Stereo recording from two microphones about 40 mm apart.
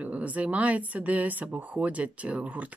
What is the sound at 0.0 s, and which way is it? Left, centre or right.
Speech, right.